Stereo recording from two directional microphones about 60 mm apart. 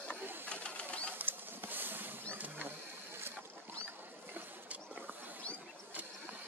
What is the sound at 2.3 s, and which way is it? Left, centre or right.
Sewing machine, right.